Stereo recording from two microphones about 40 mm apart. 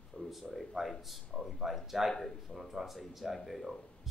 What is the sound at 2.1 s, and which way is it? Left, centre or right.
Speech, centre.